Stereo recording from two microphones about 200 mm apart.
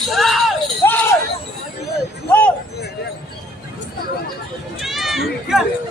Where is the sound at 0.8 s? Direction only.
10° left (ahead or behind).